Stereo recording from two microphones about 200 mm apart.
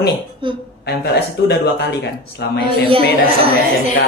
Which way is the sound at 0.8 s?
55° left (ahead or behind).